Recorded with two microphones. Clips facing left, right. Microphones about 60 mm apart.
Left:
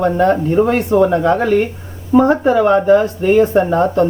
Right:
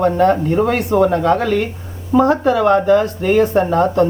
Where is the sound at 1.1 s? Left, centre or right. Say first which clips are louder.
Left 2 dB; left.